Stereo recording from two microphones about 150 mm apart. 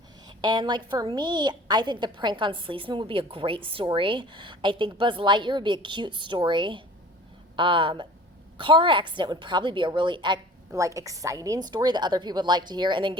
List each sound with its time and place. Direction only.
0.3 s a woman's voice: 30° right (ahead or behind)
10.7 s a woman's voice: 20° right (ahead or behind)